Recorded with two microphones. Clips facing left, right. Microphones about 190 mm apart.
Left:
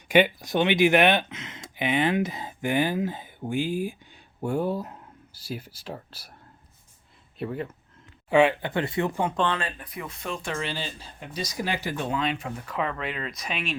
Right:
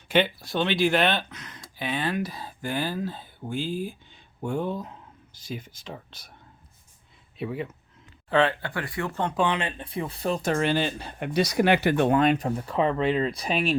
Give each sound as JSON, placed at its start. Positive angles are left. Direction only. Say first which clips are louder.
{"t": 0.1, "sound": "speech", "louder": "left 3 dB", "side_deg": 15}
{"t": 7.3, "sound": "speech", "louder": "even", "side_deg": 0}
{"t": 8.3, "sound": "speech", "louder": "left 3 dB", "side_deg": 15}
{"t": 9.3, "sound": "speech", "louder": "right 1 dB", "side_deg": -10}
{"t": 9.6, "sound": "speech", "louder": "right 4 dB", "side_deg": -25}